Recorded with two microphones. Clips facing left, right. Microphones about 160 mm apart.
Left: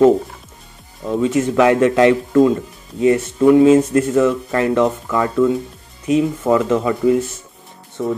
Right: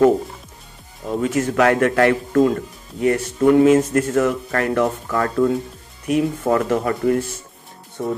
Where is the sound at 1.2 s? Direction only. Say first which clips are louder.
Left 3 dB; 20° left (ahead or behind).